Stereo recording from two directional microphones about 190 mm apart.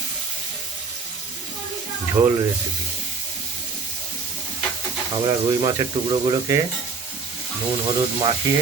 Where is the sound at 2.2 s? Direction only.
10° right (ahead or behind).